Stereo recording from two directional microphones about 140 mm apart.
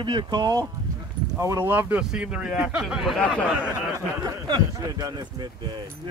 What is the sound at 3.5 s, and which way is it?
Speech, 10° right (ahead or behind).